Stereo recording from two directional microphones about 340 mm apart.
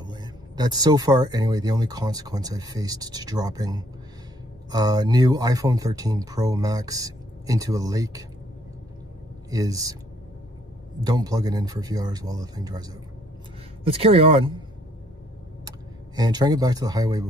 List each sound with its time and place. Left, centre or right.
0.0 s speech: centre
9.5 s speech: centre
11.1 s speech: centre
13.8 s speech: centre
16.2 s speech: centre